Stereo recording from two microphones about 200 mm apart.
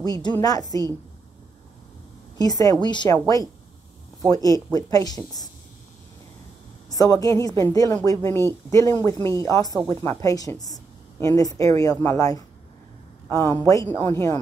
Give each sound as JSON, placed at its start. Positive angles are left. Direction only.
{"t": 0.0, "sound": "a woman's voice", "side_deg": 20}
{"t": 2.3, "sound": "a woman's voice", "side_deg": 20}
{"t": 4.3, "sound": "a woman's voice", "side_deg": 15}
{"t": 6.9, "sound": "a woman's voice", "side_deg": 15}